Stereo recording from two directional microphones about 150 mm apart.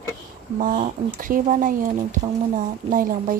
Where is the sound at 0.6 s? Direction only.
60° right (ahead or behind).